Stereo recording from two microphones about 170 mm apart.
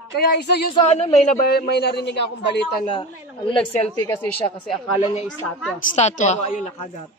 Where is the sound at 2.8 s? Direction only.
30° left (ahead or behind).